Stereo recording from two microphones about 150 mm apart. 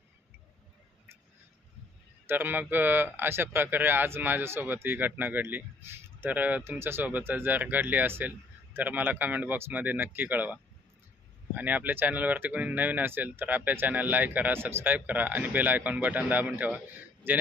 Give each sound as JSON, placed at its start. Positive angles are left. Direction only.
{"t": 2.2, "sound": "speech", "side_deg": -15}